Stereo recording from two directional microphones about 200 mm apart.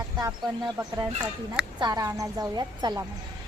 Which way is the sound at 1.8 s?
20° right (ahead or behind).